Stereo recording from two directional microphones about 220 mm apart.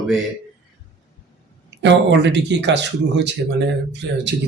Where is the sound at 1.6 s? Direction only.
55° right (ahead or behind).